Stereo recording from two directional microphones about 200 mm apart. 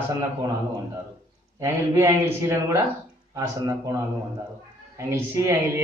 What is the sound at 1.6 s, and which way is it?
Speech, 15° right (ahead or behind).